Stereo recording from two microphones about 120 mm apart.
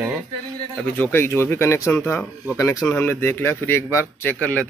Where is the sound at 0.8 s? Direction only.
15° left (ahead or behind).